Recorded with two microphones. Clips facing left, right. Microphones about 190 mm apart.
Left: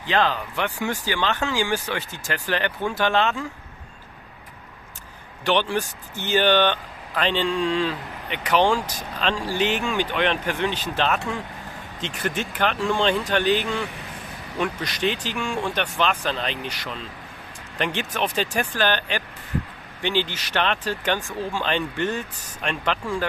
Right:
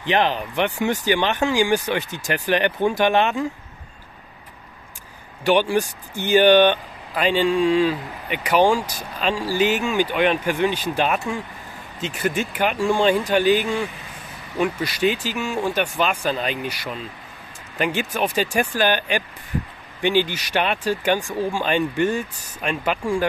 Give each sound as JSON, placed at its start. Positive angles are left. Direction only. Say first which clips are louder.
{"t": 0.0, "sound": "speech", "louder": "right 2 dB", "side_deg": -20}
{"t": 5.4, "sound": "speech", "louder": "right 4 dB", "side_deg": -10}